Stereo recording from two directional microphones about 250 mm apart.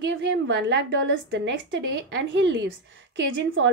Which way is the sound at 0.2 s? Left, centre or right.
Right.